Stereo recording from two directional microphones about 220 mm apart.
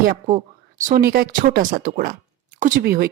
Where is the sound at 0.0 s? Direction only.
35° right (ahead or behind).